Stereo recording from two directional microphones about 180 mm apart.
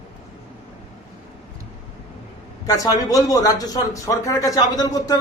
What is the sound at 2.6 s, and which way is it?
A man's voice, 20° left (ahead or behind).